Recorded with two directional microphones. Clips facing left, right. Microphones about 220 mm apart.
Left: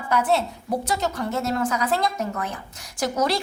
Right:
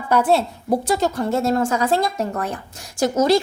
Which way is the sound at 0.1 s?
30° right (ahead or behind).